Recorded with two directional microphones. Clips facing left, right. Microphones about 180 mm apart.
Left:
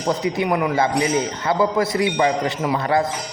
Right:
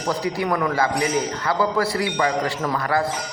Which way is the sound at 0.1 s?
20° left (ahead or behind).